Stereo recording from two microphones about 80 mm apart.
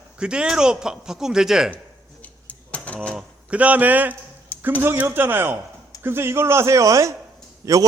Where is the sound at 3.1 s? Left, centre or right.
Centre.